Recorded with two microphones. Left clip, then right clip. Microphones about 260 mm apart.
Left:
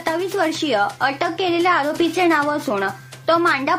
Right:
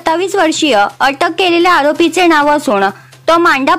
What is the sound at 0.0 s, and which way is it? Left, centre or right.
A woman's voice, right.